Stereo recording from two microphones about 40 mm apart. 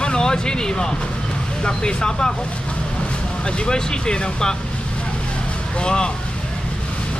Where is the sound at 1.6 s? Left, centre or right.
Left.